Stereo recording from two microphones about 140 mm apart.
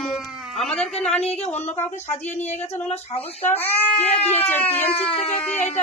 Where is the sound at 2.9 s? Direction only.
50° left (ahead or behind).